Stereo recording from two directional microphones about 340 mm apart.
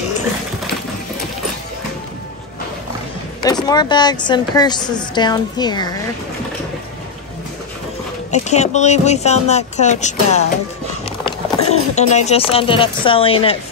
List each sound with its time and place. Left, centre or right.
3.4 s speech: centre
8.3 s speech: centre